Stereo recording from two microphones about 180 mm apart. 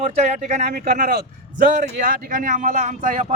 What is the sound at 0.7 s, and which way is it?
Speech, 55° right (ahead or behind).